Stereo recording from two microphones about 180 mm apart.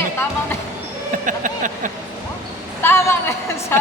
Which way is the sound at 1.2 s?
45° right (ahead or behind).